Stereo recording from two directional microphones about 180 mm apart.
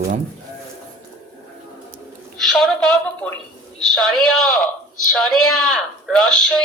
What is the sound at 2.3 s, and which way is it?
A woman's voice, centre (ahead or behind).